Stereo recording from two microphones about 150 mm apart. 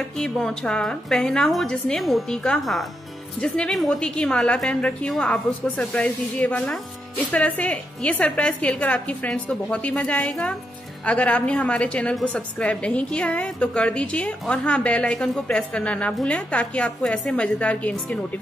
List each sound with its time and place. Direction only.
0.2 s a woman's voice: 5° left (ahead or behind)